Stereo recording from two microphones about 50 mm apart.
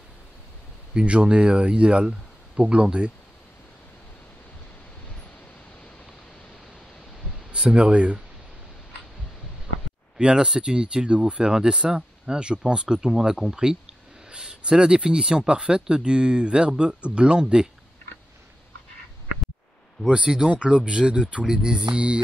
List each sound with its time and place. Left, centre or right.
0.9 s speech: centre
7.2 s a sound: centre
10.1 s speech: centre
20.1 s speech: centre